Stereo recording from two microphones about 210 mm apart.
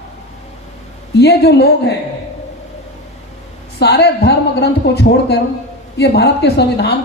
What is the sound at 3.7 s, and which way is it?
A woman's voice, 50° left (ahead or behind).